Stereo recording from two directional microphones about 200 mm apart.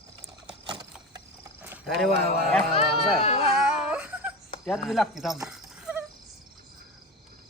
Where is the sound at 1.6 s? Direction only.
5° right (ahead or behind).